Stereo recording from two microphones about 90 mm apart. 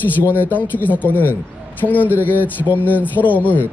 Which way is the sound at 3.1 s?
20° left (ahead or behind).